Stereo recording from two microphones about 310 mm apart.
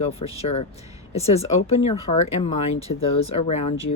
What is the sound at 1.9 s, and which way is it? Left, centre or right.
Speech, left.